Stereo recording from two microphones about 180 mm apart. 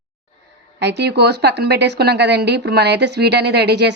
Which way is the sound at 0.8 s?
70° right (ahead or behind).